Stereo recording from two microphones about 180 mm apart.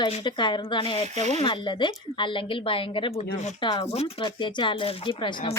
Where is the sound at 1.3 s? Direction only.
30° left (ahead or behind).